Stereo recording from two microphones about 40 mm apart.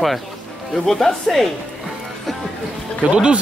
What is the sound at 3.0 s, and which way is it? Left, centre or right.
Speech, right.